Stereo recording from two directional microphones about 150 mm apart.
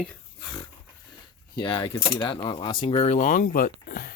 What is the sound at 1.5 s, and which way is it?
Speech, 30° left (ahead or behind).